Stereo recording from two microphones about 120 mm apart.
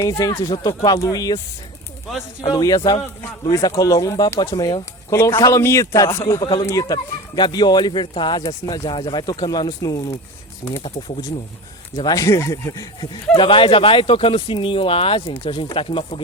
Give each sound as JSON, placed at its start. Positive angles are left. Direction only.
{"t": 0.0, "sound": "speech", "side_deg": 30}
{"t": 2.5, "sound": "speech", "side_deg": 30}
{"t": 4.5, "sound": "speech", "side_deg": 40}
{"t": 5.0, "sound": "speech", "side_deg": 25}
{"t": 6.4, "sound": "speech", "side_deg": 40}
{"t": 11.9, "sound": "speech", "side_deg": 30}
{"t": 13.3, "sound": "speech", "side_deg": 45}